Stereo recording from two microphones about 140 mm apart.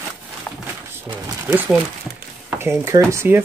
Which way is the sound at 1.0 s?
15° right (ahead or behind).